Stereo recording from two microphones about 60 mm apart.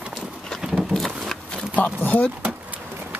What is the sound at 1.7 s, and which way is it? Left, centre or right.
Speech, left.